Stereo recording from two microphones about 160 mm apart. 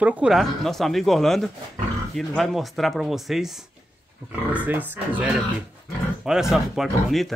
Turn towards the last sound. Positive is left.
turn(degrees=0)  # may be behind; listen again after turning